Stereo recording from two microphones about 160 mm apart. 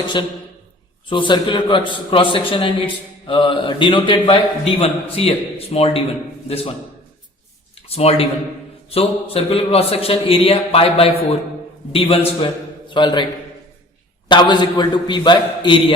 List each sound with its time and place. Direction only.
0.2 s a man's voice: 30° left (ahead or behind)
7.8 s a sound: 40° left (ahead or behind)
8.9 s a man's voice: 40° left (ahead or behind)
14.3 s a man's voice: 30° left (ahead or behind)